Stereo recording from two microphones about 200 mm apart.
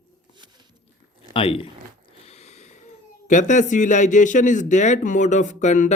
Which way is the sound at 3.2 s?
40° left (ahead or behind).